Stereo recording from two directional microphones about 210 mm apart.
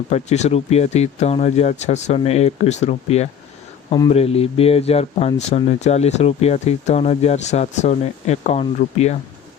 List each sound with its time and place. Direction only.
0.1 s speech: 30° left (ahead or behind)